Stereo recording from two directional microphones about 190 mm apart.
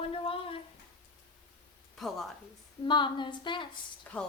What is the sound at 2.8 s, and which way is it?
Speech, 25° left (ahead or behind).